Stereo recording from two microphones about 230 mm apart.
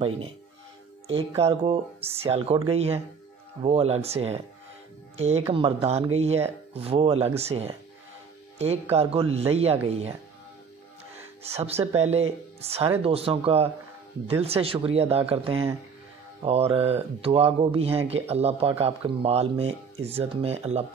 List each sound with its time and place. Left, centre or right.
1.1 s speech: right
8.9 s speech: right
11.4 s speech: right